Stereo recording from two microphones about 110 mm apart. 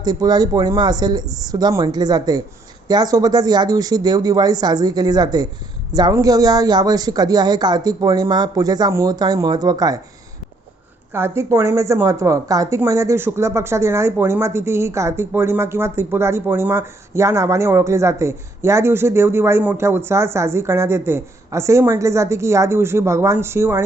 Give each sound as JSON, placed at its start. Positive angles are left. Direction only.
{"t": 0.0, "sound": "speech", "side_deg": -35}
{"t": 11.1, "sound": "a woman's voice", "side_deg": -20}